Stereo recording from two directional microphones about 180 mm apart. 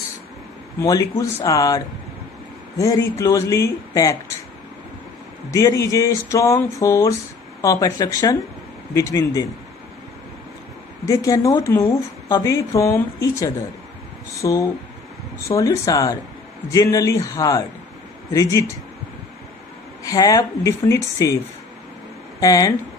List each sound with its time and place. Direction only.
0.7 s speech: 20° left (ahead or behind)
2.8 s speech: 15° left (ahead or behind)
5.5 s speech: 20° left (ahead or behind)
11.1 s speech: 20° left (ahead or behind)
20.0 s speech: 20° left (ahead or behind)
22.4 s speech: 20° left (ahead or behind)